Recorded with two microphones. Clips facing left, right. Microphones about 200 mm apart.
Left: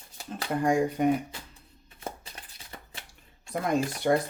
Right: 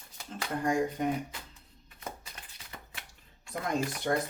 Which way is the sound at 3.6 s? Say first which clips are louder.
Left 5 dB; 65° left (ahead or behind).